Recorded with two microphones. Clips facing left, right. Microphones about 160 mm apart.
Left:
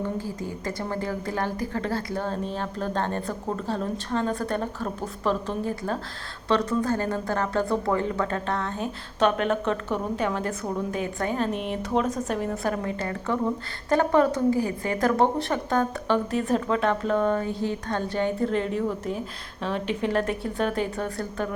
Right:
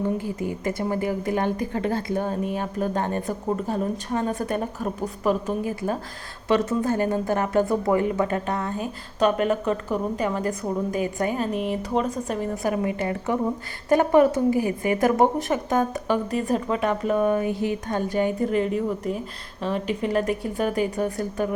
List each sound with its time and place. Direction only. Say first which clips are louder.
0.3 s a woman's voice: right 4 dB; 20° right (ahead or behind)
6.5 s speech: right 2 dB; 20° right (ahead or behind)